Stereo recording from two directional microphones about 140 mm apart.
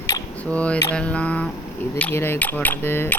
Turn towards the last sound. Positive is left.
turn(degrees=15)  # may be behind; listen again after turning